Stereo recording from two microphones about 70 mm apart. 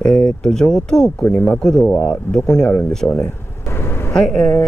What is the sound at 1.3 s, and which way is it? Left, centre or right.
Speech, centre.